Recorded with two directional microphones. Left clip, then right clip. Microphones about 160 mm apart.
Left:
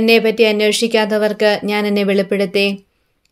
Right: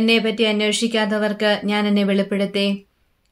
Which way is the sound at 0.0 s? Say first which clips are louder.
Left 6 dB; 40° left (ahead or behind).